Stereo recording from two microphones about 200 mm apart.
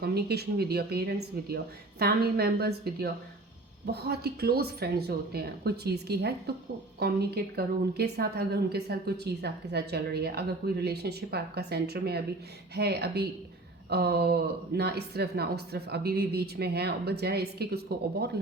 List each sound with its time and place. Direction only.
0.0 s a woman's voice: 55° right (ahead or behind)